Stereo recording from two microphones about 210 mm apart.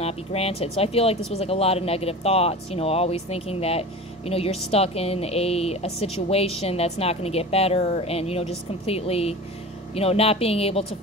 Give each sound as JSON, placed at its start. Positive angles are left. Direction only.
{"t": 0.0, "sound": "a woman's voice", "side_deg": 30}